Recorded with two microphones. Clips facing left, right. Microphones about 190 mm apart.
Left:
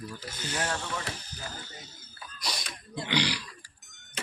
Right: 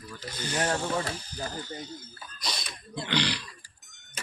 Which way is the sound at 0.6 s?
40° right (ahead or behind).